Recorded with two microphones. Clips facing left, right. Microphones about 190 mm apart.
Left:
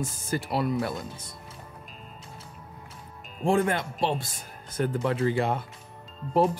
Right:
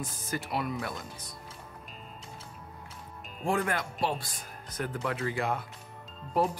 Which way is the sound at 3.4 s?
25° left (ahead or behind).